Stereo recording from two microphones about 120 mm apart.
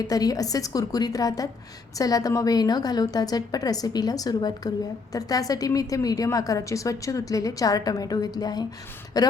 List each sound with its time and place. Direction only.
0.0 s a woman's voice: 30° left (ahead or behind)